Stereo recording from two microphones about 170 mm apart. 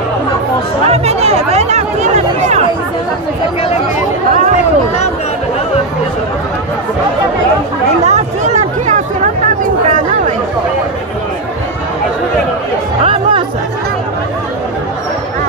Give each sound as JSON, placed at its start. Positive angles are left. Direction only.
{"t": 0.8, "sound": "chatter", "side_deg": -40}
{"t": 8.1, "sound": "a sound", "side_deg": -40}
{"t": 9.8, "sound": "chatter", "side_deg": -50}
{"t": 13.0, "sound": "music", "side_deg": -30}